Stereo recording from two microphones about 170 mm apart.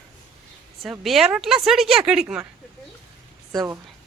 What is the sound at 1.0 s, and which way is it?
Speech, centre (ahead or behind).